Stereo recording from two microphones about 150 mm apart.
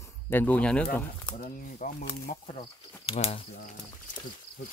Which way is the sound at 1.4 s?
60° left (ahead or behind).